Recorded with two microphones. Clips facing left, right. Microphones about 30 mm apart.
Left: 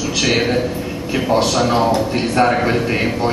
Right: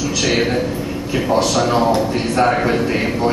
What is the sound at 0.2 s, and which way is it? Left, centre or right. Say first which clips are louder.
A man's voice: left 1 dB; centre.